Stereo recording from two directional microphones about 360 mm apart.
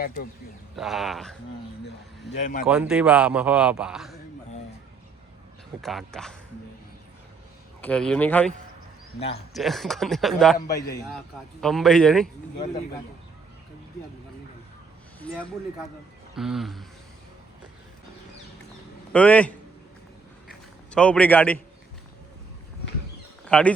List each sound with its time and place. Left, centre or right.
0.8 s a man's voice: centre
2.3 s speech: left
2.6 s a man's voice: centre
5.8 s a man's voice: centre
7.8 s a man's voice: centre
9.1 s speech: centre
9.6 s a man's voice: centre
16.3 s a man's voice: centre
19.1 s a man's voice: centre
20.5 s a sound: centre
23.5 s speech: centre